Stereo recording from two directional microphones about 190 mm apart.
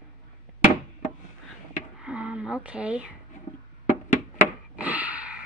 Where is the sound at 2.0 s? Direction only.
5° right (ahead or behind).